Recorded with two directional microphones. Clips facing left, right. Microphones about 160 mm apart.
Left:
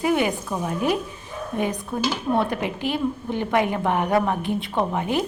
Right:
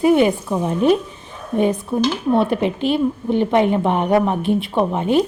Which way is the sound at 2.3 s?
20° right (ahead or behind).